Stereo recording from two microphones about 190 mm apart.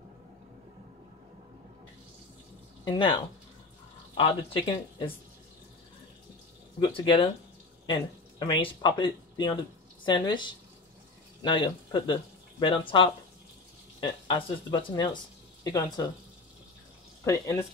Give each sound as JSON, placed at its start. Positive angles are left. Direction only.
{"t": 2.8, "sound": "speech", "side_deg": 25}
{"t": 4.2, "sound": "speech", "side_deg": 25}
{"t": 6.8, "sound": "speech", "side_deg": 25}
{"t": 17.2, "sound": "speech", "side_deg": 15}